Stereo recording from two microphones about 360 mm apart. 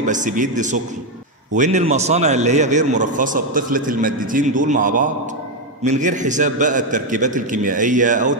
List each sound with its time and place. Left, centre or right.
0.0 s a man's voice: right